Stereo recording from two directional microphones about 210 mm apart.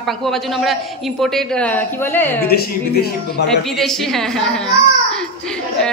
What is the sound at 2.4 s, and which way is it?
Speech, 50° left (ahead or behind).